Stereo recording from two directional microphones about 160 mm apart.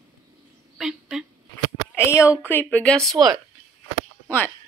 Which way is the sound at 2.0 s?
20° left (ahead or behind).